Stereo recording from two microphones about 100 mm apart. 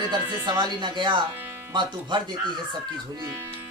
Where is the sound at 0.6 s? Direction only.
50° right (ahead or behind).